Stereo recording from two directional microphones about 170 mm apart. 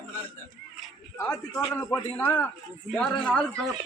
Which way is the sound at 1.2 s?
20° left (ahead or behind).